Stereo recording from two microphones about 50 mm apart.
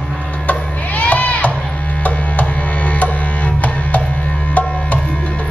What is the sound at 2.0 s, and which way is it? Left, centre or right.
Music, left.